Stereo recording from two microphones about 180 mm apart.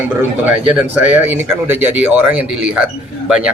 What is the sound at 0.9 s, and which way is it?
A man's voice, 10° right (ahead or behind).